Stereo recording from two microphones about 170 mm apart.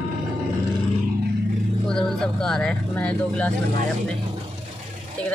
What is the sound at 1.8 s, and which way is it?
Speech, 5° left (ahead or behind).